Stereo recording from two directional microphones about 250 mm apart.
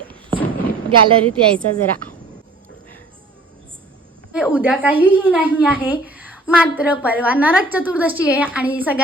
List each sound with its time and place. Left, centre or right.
0.9 s a woman's voice: right
1.3 s a woman's voice: centre
4.3 s a woman's voice: centre